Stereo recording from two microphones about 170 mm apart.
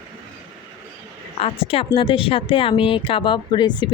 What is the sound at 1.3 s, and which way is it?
A woman's voice, 35° left (ahead or behind).